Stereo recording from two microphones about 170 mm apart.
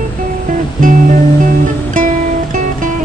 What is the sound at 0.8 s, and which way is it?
Music, 50° right (ahead or behind).